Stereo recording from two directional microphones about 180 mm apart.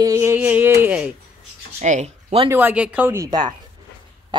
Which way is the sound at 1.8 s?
40° right (ahead or behind).